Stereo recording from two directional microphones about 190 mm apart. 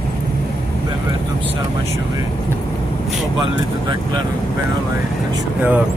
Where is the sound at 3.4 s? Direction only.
25° right (ahead or behind).